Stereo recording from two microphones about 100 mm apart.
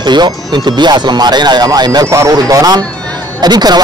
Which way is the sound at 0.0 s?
45° right (ahead or behind).